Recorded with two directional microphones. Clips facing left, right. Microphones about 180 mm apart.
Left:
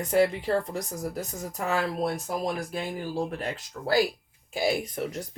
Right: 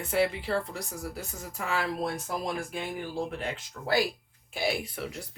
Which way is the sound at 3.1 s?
40° left (ahead or behind).